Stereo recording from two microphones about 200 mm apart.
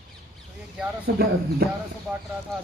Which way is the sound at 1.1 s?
55° right (ahead or behind).